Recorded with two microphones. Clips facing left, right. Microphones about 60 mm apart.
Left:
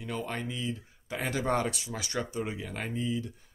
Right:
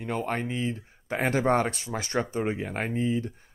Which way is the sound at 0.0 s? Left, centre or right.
Right.